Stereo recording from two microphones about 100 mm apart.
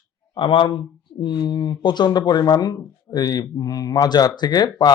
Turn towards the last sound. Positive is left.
turn(degrees=45)  # may be behind; listen again after turning